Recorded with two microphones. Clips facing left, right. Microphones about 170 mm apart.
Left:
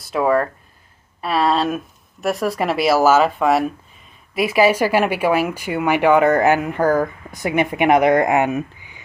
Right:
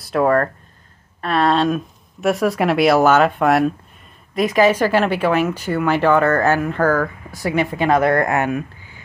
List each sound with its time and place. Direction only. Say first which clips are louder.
0.0 s speech: right 1 dB; centre (ahead or behind); by 9.0 s 15° left (ahead or behind)